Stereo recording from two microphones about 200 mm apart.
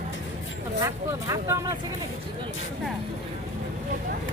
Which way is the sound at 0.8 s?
15° right (ahead or behind).